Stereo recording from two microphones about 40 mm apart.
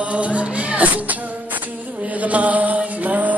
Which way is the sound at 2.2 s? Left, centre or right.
Right.